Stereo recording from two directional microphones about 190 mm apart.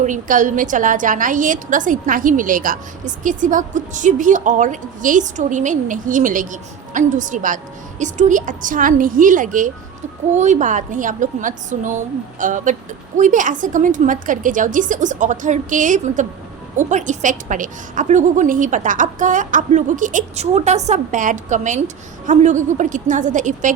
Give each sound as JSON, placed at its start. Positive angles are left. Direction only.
{"t": 0.0, "sound": "a woman's voice", "side_deg": -45}